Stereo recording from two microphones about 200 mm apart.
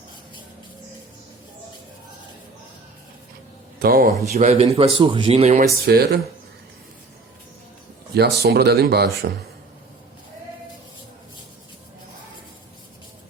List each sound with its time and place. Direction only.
3.8 s a man's voice: 50° right (ahead or behind)
4.4 s speech: 35° right (ahead or behind)
5.8 s speech: 50° right (ahead or behind)
8.1 s speech: 50° right (ahead or behind)